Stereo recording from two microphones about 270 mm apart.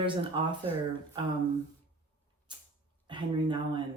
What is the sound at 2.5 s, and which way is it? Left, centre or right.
Mechanisms, centre.